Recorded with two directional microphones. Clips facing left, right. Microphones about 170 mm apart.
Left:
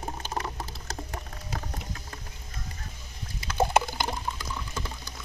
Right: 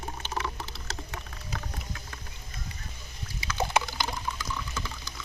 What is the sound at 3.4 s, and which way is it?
Water, 55° left (ahead or behind).